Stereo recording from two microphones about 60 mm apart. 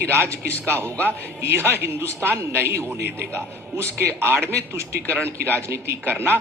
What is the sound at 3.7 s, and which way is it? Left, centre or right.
Speech, right.